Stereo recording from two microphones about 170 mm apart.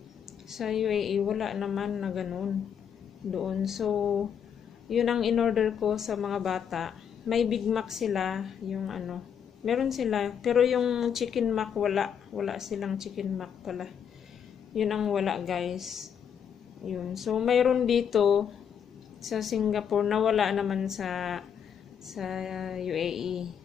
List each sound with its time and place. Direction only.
0.5 s a woman's voice: centre (ahead or behind)